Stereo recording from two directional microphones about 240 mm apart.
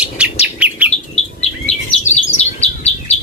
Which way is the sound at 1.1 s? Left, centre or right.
Left.